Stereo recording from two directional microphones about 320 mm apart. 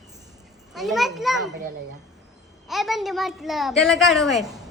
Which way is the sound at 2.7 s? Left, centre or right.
Centre.